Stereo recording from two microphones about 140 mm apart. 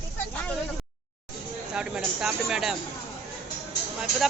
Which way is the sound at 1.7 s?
5° right (ahead or behind).